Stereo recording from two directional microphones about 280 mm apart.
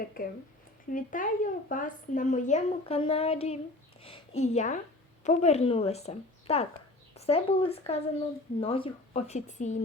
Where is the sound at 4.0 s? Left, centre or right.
Left.